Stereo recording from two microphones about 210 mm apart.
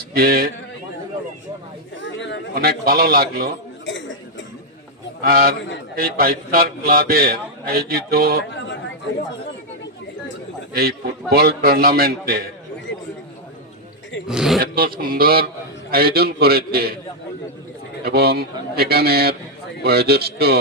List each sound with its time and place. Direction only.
0.1 s a man's voice: 45° right (ahead or behind)
2.0 s chatter: 60° left (ahead or behind)
2.6 s a man's voice: 45° right (ahead or behind)
3.8 s dishes: 60° left (ahead or behind)
5.2 s a man's voice: 45° right (ahead or behind)
10.8 s a man's voice: 45° right (ahead or behind)
14.3 s speech: centre (ahead or behind)
14.6 s a man's voice: 45° right (ahead or behind)
18.0 s a man's voice: 50° right (ahead or behind)